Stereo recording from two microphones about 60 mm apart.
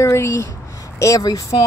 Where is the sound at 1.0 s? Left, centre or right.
Left.